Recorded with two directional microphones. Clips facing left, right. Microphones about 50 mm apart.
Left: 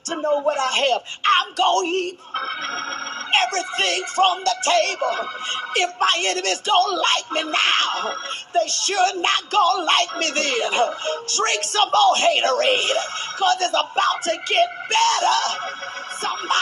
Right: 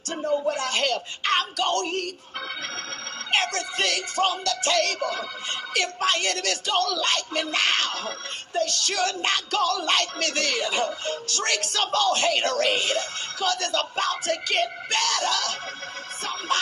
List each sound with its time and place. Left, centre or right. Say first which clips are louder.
0.1 s music: left 5 dB; left